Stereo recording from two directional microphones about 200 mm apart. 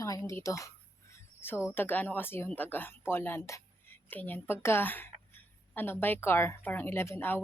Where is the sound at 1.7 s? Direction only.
10° left (ahead or behind).